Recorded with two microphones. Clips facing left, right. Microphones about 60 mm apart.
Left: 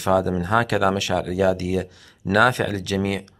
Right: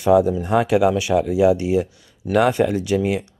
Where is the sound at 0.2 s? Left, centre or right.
Left.